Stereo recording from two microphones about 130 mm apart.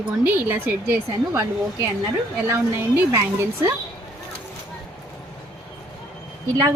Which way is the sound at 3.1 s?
25° right (ahead or behind).